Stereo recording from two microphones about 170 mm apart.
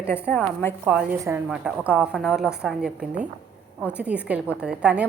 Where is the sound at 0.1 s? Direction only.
10° left (ahead or behind).